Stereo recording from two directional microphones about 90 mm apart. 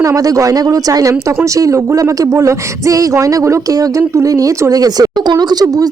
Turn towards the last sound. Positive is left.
turn(degrees=-45)  # may be behind; listen again after turning